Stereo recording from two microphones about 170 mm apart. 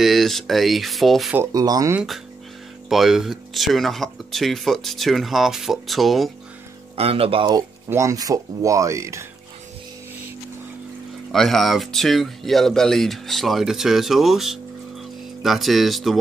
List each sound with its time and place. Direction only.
0.0 s speech: centre (ahead or behind)
1.3 s speech: 20° right (ahead or behind)
2.0 s speech: centre (ahead or behind)
7.0 s speech: 35° right (ahead or behind)
7.9 s speech: 20° right (ahead or behind)
11.3 s speech: centre (ahead or behind)